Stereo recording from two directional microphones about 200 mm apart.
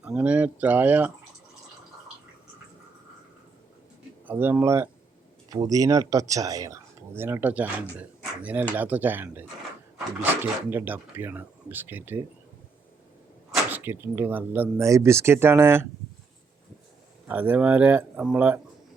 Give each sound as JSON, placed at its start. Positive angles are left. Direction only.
{"t": 0.0, "sound": "speech", "side_deg": -5}
{"t": 4.3, "sound": "speech", "side_deg": -10}
{"t": 13.7, "sound": "speech", "side_deg": -10}
{"t": 17.2, "sound": "speech", "side_deg": -10}